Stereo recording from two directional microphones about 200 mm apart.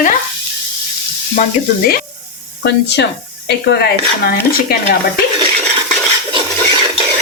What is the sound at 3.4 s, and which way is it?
Speech, 55° left (ahead or behind).